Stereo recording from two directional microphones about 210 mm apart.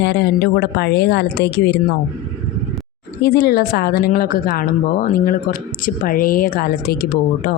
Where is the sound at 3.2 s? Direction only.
50° left (ahead or behind).